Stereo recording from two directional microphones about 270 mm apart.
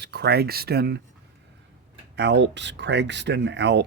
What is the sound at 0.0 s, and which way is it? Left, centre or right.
Speech, right.